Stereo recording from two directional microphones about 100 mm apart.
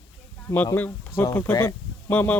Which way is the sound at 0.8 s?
20° left (ahead or behind).